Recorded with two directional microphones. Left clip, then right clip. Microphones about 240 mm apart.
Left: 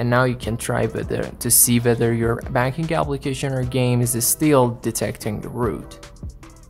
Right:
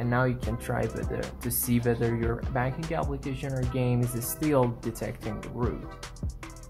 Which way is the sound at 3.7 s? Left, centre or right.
Left.